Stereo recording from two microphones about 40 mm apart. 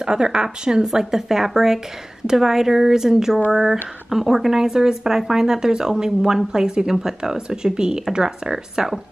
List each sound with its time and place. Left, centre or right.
0.0 s a woman's voice: right